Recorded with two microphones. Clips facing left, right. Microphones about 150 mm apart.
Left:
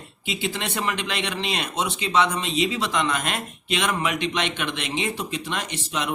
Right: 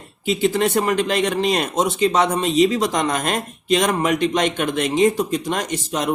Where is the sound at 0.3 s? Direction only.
45° right (ahead or behind).